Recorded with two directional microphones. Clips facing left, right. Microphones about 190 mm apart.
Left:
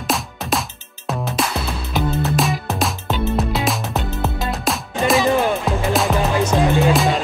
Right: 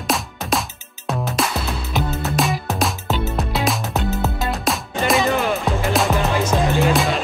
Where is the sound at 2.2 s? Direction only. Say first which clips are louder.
Left 1 dB; centre (ahead or behind).